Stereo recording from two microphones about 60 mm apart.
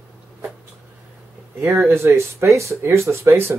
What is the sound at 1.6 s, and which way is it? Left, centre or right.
Speech, right.